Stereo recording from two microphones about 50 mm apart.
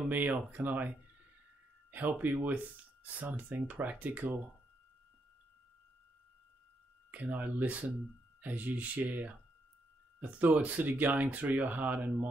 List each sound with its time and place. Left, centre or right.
0.1 s speech: right
7.1 s speech: right
10.4 s speech: right